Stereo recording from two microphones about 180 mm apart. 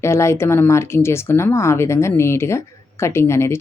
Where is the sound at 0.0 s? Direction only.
15° left (ahead or behind).